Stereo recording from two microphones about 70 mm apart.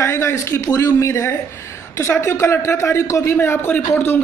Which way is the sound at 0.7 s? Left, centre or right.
Left.